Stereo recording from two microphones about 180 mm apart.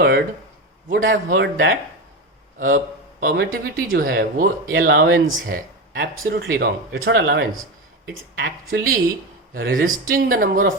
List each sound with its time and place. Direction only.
0.9 s speech: 50° right (ahead or behind)
1.3 s speech: 75° right (ahead or behind)
2.6 s a man's voice: 45° right (ahead or behind)
4.7 s speech: 65° right (ahead or behind)
5.5 s speech: 55° right (ahead or behind); by 7.4 s 80° right
8.0 s speech: 70° right (ahead or behind)
9.6 s speech: 55° right (ahead or behind)